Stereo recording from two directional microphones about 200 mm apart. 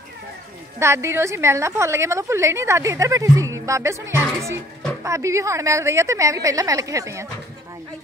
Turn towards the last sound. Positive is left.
turn(degrees=-15)  # may be behind; listen again after turning